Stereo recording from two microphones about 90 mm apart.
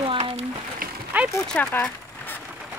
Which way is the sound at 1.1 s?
20° right (ahead or behind).